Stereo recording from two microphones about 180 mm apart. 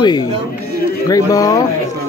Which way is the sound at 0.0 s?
25° left (ahead or behind).